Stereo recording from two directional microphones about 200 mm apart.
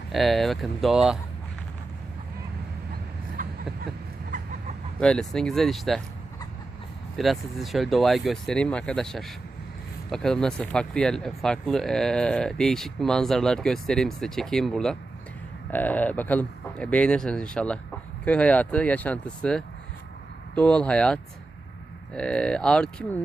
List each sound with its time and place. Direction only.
0.1 s speech: centre (ahead or behind)
3.4 s vehicle: 40° right (ahead or behind)
4.9 s speech: 5° left (ahead or behind)
7.2 s speech: centre (ahead or behind)